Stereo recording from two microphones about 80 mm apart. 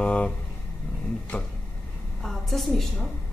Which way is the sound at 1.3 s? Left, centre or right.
Centre.